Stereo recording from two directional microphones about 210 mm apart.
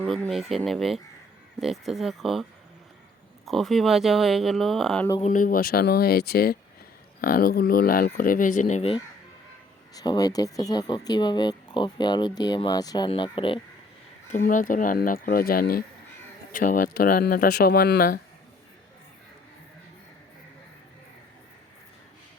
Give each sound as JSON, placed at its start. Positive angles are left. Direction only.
{"t": 0.0, "sound": "speech", "side_deg": 0}
{"t": 5.2, "sound": "speech", "side_deg": 40}
{"t": 9.9, "sound": "speech", "side_deg": 20}
{"t": 14.3, "sound": "speech", "side_deg": 35}